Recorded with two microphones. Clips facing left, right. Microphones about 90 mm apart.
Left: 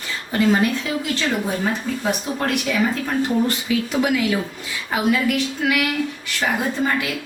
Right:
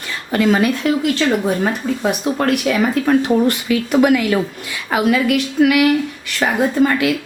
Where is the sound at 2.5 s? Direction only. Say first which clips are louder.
Right 3 dB; 65° right (ahead or behind).